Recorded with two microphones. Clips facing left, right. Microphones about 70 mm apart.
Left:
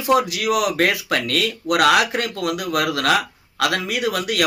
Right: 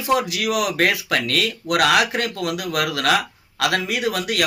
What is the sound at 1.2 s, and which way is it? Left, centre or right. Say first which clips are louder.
A man's voice: left 1 dB; right.